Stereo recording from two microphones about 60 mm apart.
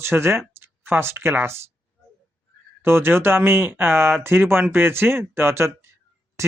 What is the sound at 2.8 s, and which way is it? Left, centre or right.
Speech, right.